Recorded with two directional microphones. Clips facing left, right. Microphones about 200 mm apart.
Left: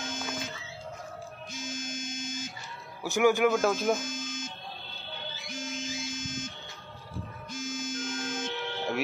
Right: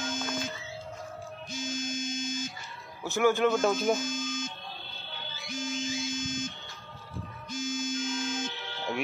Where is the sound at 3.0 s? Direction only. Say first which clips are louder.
Left 1 dB; 15° left (ahead or behind).